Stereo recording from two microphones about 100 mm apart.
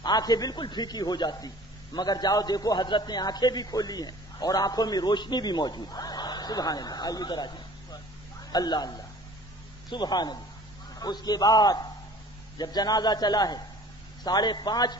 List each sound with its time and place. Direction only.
0.0 s a man's voice: 45° left (ahead or behind)
8.5 s a man's voice: 45° left (ahead or behind)
9.9 s a man's voice: 45° left (ahead or behind)